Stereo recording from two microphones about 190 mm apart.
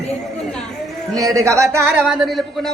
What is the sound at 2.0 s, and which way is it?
Speech, centre (ahead or behind).